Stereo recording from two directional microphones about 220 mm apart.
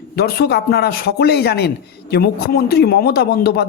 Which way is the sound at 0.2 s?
45° left (ahead or behind).